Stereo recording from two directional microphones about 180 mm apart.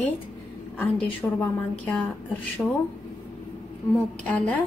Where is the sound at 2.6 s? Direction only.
5° left (ahead or behind).